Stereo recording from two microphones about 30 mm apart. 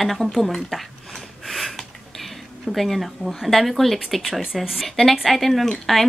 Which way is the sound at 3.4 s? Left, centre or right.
Centre.